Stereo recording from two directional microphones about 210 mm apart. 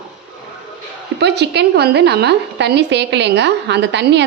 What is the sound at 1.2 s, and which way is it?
A woman's voice, 55° right (ahead or behind).